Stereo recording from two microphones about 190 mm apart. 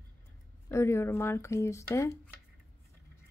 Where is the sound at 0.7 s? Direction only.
15° left (ahead or behind).